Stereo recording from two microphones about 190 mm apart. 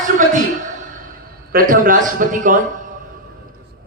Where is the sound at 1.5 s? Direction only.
45° right (ahead or behind).